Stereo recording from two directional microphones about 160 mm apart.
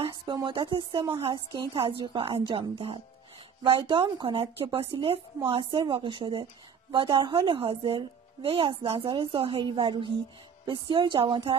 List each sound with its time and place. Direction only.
0.0 s a woman's voice: 30° right (ahead or behind)